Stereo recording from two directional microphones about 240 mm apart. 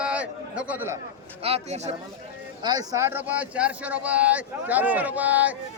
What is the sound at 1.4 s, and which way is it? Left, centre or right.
Speech, right.